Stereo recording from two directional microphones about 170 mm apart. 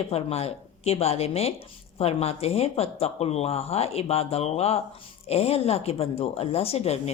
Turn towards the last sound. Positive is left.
turn(degrees=40)  # may be behind; listen again after turning